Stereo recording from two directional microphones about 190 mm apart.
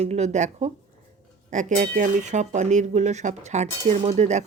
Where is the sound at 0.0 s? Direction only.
35° right (ahead or behind).